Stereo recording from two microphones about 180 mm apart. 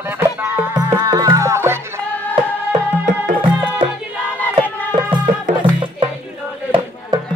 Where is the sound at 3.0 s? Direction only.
50° right (ahead or behind).